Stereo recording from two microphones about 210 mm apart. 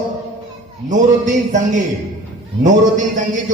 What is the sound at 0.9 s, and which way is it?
A man's voice, 35° right (ahead or behind).